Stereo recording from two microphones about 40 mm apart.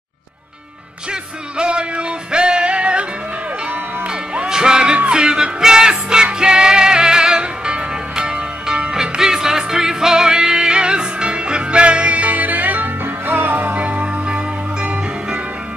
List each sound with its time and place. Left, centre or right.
1.6 s music: right
4.1 s music: centre; by 12.9 s right
13.0 s music: right